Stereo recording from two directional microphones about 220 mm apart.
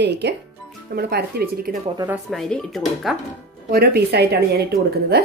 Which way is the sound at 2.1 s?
Centre (ahead or behind).